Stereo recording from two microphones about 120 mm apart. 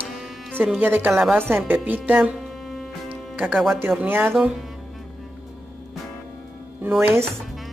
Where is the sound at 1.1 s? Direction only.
5° right (ahead or behind).